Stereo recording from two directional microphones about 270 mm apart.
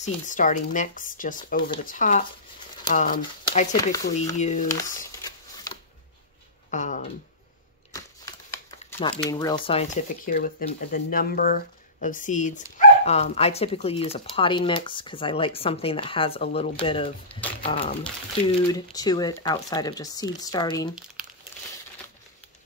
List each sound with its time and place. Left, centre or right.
0.0 s speech: left
4.7 s shuffling cards: centre
6.7 s speech: left
7.9 s speech: centre
18.0 s speech: centre